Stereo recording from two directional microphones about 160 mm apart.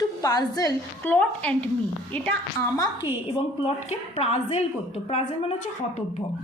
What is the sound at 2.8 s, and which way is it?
A woman's voice, 30° left (ahead or behind).